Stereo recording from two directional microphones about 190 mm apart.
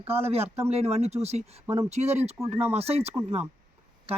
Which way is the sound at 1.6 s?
15° right (ahead or behind).